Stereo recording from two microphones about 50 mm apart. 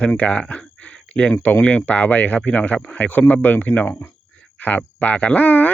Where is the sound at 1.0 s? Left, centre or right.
Left.